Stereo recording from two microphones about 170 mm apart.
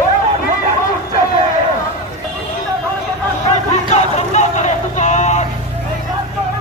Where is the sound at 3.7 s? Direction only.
40° left (ahead or behind).